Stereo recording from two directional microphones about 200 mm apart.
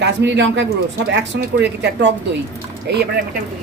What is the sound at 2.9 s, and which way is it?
Speech, 60° right (ahead or behind).